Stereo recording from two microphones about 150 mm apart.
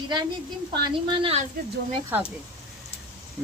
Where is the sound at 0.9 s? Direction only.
35° right (ahead or behind).